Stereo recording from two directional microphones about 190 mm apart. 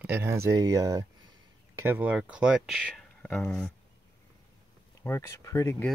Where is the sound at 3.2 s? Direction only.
5° left (ahead or behind).